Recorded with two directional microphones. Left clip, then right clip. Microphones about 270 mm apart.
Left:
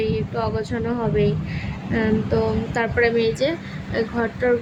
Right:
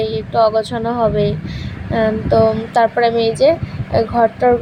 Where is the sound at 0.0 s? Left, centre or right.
Centre.